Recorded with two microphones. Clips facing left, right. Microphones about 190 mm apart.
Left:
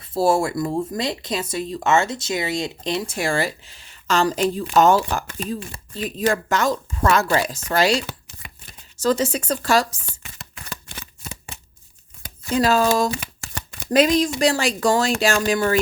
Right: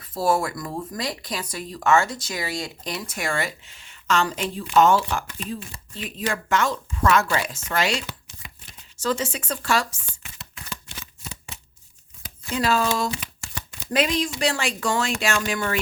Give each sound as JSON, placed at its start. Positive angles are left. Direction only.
{"t": 0.0, "sound": "speech", "side_deg": 30}
{"t": 9.0, "sound": "chopping", "side_deg": 40}
{"t": 12.5, "sound": "speech", "side_deg": 40}